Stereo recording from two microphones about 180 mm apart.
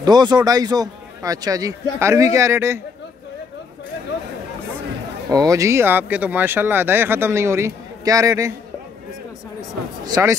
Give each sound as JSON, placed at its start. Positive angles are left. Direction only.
{"t": 0.0, "sound": "a man's voice", "side_deg": -25}
{"t": 5.3, "sound": "speech", "side_deg": -20}
{"t": 10.0, "sound": "speech", "side_deg": -20}